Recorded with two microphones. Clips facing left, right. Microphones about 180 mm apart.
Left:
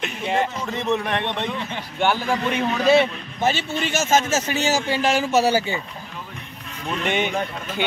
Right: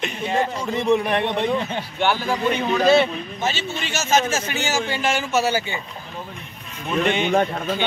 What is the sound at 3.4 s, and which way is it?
Speech, 55° left (ahead or behind).